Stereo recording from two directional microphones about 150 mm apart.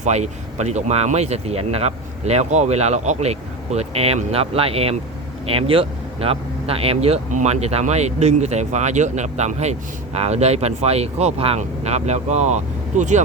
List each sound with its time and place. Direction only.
0.0 s speech: 50° right (ahead or behind)